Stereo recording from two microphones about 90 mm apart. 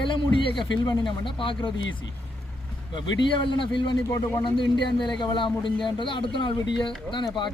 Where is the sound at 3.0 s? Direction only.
55° left (ahead or behind).